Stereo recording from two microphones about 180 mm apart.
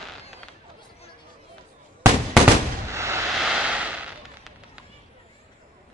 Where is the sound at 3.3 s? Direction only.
5° right (ahead or behind).